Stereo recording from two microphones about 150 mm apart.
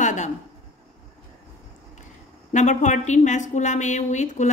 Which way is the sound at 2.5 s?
55° left (ahead or behind).